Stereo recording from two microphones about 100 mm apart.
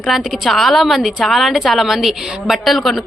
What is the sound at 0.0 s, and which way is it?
A woman's voice, centre (ahead or behind).